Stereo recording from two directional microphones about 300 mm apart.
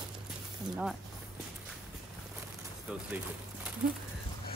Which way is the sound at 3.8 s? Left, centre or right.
Right.